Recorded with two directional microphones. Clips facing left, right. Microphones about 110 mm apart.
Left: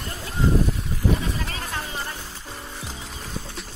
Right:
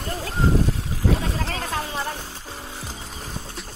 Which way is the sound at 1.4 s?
90° right.